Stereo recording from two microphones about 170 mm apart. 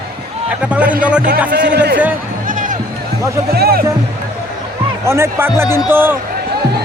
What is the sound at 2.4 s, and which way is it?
Music, 50° right (ahead or behind).